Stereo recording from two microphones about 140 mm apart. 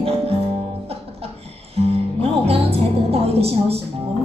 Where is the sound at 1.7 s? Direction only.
45° right (ahead or behind).